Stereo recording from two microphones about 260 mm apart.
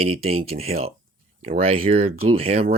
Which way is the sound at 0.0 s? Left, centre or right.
Right.